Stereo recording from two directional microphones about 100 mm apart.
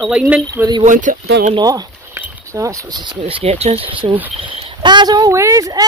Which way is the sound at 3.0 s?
75° right (ahead or behind).